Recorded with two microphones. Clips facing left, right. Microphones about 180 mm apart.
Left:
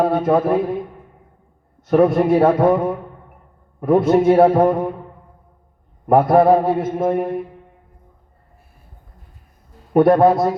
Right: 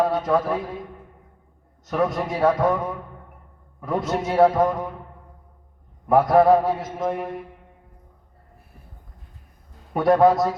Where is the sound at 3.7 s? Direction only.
55° left (ahead or behind).